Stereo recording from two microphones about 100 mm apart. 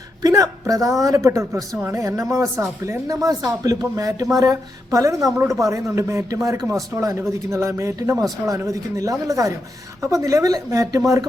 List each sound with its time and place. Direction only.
0.2 s speech: 40° right (ahead or behind)